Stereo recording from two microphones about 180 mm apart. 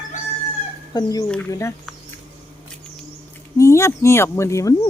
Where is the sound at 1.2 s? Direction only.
5° left (ahead or behind).